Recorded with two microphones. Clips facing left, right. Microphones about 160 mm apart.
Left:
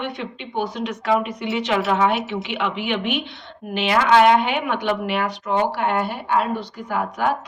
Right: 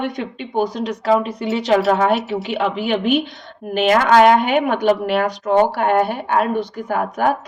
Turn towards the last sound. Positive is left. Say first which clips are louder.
# right 4 dB
turn(degrees=-45)  # may be behind; listen again after turning